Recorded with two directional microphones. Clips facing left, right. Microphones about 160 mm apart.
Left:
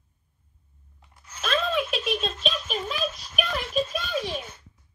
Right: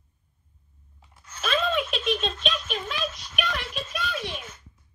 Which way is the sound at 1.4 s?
Centre (ahead or behind).